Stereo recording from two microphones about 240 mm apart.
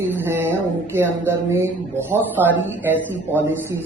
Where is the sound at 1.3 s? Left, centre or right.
Centre.